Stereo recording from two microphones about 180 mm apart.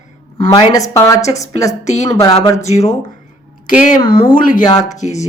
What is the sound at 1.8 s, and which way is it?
Speech, 40° left (ahead or behind).